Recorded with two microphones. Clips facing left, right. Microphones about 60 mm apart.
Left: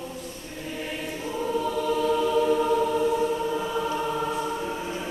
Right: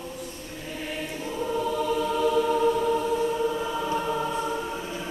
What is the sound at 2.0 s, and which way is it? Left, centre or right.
Music, centre.